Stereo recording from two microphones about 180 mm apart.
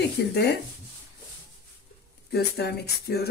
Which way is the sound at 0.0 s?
65° left (ahead or behind).